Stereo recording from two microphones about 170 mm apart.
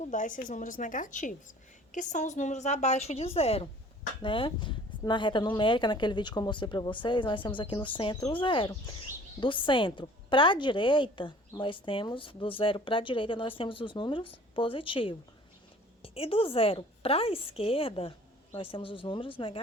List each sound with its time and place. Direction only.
0.1 s a woman's voice: 50° left (ahead or behind); by 19.5 s 30° left (ahead or behind)